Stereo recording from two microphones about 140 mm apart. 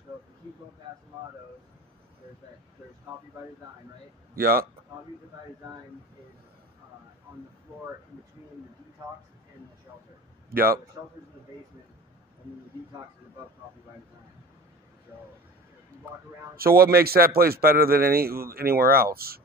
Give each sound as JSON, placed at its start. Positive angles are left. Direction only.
{"t": 4.4, "sound": "a man's voice", "side_deg": -90}
{"t": 10.5, "sound": "a man's voice", "side_deg": -90}
{"t": 16.5, "sound": "a man's voice", "side_deg": -90}